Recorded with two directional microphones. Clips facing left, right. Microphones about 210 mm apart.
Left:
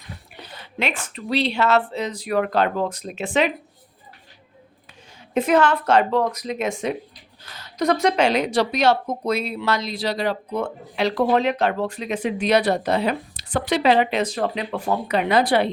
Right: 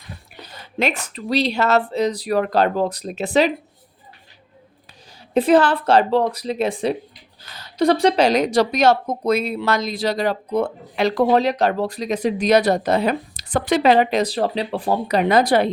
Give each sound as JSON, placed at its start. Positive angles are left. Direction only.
{"t": 0.8, "sound": "speech", "side_deg": -40}
{"t": 5.3, "sound": "speech", "side_deg": -35}